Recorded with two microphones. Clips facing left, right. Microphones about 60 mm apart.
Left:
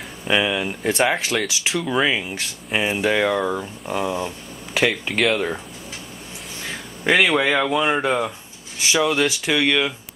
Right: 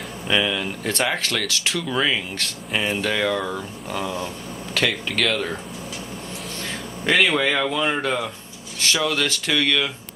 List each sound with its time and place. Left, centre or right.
0.3 s speech: centre
6.7 s speech: centre